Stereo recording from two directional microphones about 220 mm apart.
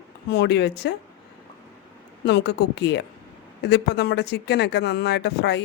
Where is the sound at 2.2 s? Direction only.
50° left (ahead or behind).